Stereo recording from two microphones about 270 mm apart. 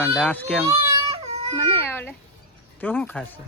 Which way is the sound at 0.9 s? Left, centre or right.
Centre.